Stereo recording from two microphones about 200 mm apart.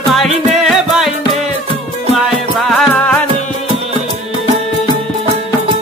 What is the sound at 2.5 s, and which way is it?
Music, centre (ahead or behind).